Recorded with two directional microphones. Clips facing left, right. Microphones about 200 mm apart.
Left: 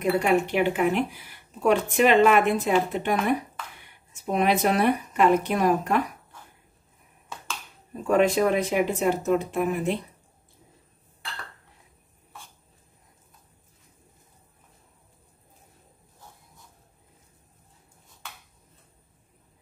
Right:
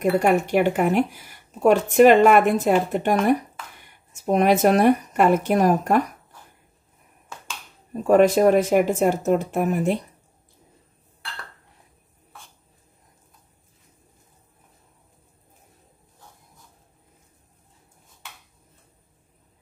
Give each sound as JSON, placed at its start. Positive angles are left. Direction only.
{"t": 0.0, "sound": "speech", "side_deg": -45}
{"t": 7.9, "sound": "speech", "side_deg": -45}